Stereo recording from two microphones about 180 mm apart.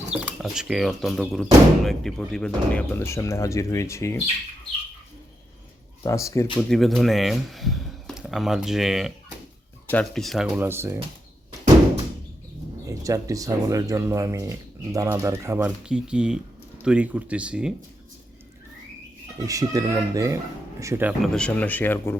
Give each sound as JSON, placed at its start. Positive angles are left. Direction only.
{"t": 0.1, "sound": "speech", "side_deg": -5}
{"t": 6.0, "sound": "speech", "side_deg": 15}
{"t": 6.6, "sound": "speech", "side_deg": 0}
{"t": 10.7, "sound": "speech", "side_deg": -15}
{"t": 12.8, "sound": "speech", "side_deg": -15}
{"t": 19.4, "sound": "speech", "side_deg": -20}
{"t": 21.3, "sound": "speech", "side_deg": 5}